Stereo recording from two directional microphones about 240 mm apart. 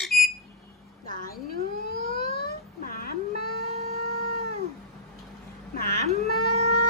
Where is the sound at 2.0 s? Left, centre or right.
Left.